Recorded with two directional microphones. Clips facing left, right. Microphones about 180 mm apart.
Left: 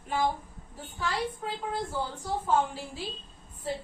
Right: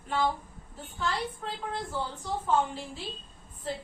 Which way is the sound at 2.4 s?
10° left (ahead or behind).